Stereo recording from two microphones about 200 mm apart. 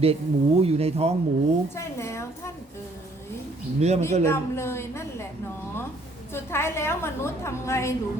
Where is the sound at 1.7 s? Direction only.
15° left (ahead or behind).